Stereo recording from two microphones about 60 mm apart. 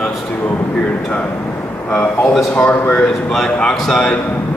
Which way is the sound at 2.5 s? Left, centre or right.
Left.